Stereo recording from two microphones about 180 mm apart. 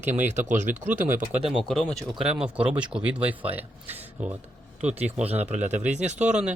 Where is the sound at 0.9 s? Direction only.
10° right (ahead or behind).